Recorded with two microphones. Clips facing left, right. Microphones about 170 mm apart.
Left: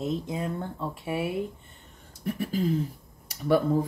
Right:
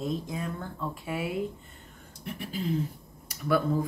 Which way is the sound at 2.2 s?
40° left (ahead or behind).